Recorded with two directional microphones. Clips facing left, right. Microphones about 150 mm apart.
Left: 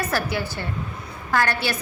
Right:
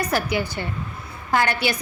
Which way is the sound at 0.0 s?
15° right (ahead or behind).